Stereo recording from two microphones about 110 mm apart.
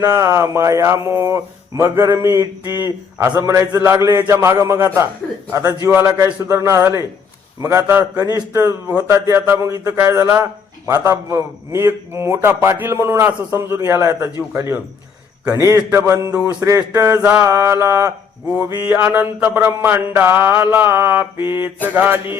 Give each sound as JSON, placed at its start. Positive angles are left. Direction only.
{"t": 0.0, "sound": "a man's voice", "side_deg": -25}
{"t": 6.4, "sound": "a man's voice", "side_deg": -25}
{"t": 16.4, "sound": "music", "side_deg": -10}
{"t": 16.6, "sound": "a man's voice", "side_deg": -25}
{"t": 17.2, "sound": "music", "side_deg": -15}
{"t": 17.5, "sound": "a man's voice", "side_deg": -25}
{"t": 18.9, "sound": "a man's voice", "side_deg": -15}